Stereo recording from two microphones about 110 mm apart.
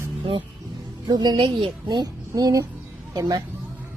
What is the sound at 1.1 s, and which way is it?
A woman's voice, 40° right (ahead or behind).